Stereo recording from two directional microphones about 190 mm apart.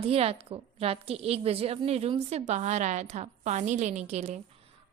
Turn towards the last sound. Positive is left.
turn(degrees=-35)  # may be behind; listen again after turning